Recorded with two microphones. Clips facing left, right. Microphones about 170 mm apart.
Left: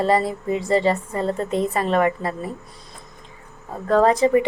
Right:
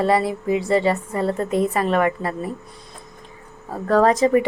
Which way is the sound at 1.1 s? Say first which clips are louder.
Right 1 dB; 10° right (ahead or behind).